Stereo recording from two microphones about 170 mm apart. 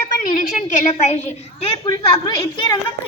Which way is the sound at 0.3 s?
45° left (ahead or behind).